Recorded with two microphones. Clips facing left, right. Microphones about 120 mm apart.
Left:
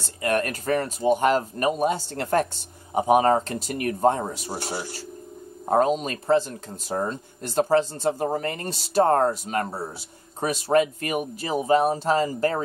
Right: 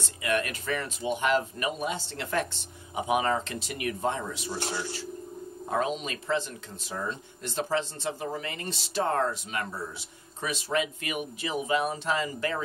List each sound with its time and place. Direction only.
0.0 s speech: 45° left (ahead or behind)